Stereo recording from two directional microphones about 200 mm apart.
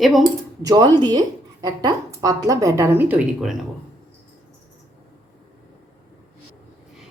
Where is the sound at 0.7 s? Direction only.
20° right (ahead or behind); by 3.6 s 5° right (ahead or behind).